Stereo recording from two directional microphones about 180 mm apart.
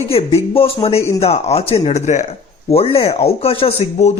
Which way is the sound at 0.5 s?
30° left (ahead or behind).